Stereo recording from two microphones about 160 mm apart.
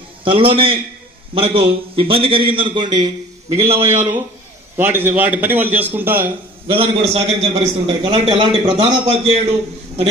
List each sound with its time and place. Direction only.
0.2 s a man's voice: 35° right (ahead or behind)
3.7 s a man's voice: 15° right (ahead or behind)
6.7 s a man's voice: 35° right (ahead or behind)